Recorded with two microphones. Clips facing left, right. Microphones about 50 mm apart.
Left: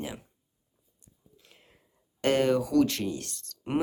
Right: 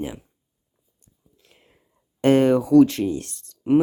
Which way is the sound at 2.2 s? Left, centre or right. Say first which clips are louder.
Right 8 dB; right.